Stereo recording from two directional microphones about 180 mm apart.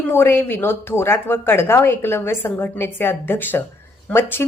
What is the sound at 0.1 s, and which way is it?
A woman's voice, 15° left (ahead or behind).